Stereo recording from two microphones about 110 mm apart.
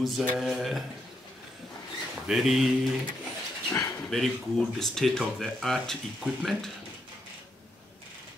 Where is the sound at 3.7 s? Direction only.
30° left (ahead or behind).